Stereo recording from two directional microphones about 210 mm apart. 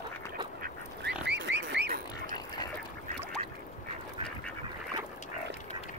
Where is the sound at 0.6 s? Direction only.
50° right (ahead or behind).